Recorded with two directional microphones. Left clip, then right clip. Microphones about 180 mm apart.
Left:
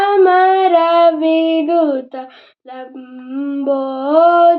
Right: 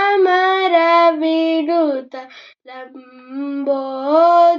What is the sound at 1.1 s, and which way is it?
Music, 25° left (ahead or behind).